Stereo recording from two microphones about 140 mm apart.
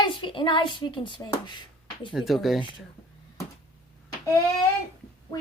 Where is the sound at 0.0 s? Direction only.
35° left (ahead or behind).